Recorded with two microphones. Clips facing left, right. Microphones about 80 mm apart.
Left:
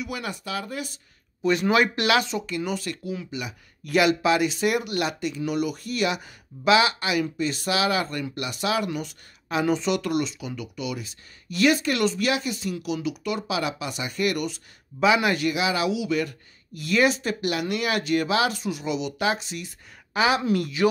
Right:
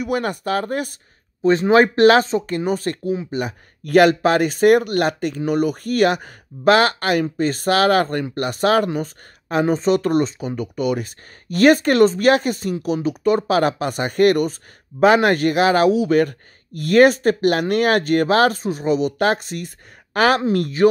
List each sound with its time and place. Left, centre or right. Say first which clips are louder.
0.0 s speech: right 10 dB; right
1.4 s speech: right 7 dB; right